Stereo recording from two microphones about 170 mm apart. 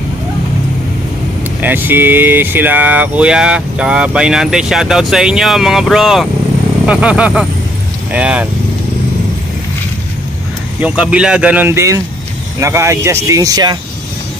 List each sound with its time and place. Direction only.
1.6 s speech: 10° right (ahead or behind)
10.8 s speech: 5° right (ahead or behind); by 13.7 s 20° right (ahead or behind)